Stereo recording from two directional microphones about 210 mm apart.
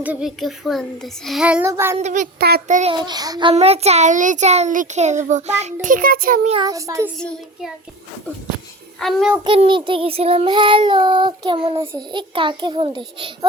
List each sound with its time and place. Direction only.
0.0 s a child's voice: 5° right (ahead or behind)
2.0 s a child's voice: 35° right (ahead or behind)
2.9 s child singing: 20° right (ahead or behind)
3.5 s a child's voice: 30° right (ahead or behind)
6.6 s a child's voice: 15° right (ahead or behind)
7.2 s a child's voice: 5° left (ahead or behind)
9.0 s a child's voice: centre (ahead or behind)
9.4 s child singing: 25° right (ahead or behind)